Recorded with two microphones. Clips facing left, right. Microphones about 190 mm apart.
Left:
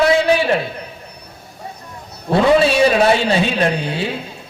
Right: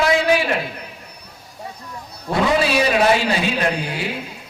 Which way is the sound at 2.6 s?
25° left (ahead or behind).